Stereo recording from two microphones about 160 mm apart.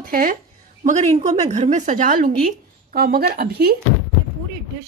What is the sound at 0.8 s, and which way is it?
A woman's voice, 45° right (ahead or behind).